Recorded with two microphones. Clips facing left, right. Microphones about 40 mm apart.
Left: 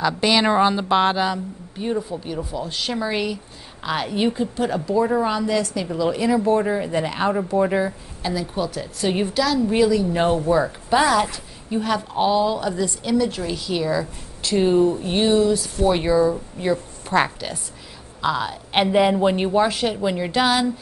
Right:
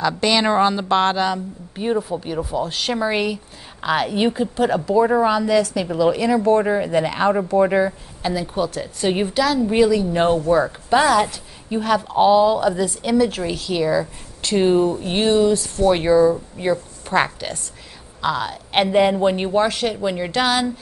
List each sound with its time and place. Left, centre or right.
0.0 s speech: centre
2.1 s a woman's voice: right
5.3 s speech: centre
5.8 s a woman's voice: centre
6.1 s a woman's voice: centre
14.5 s speech: right
15.5 s speech: centre
15.9 s a woman's voice: centre